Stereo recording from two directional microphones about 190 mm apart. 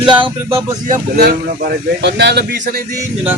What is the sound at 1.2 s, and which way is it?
Speech, 55° right (ahead or behind).